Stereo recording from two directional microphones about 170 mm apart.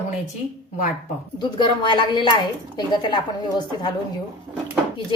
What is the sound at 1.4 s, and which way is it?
Speech, 25° left (ahead or behind).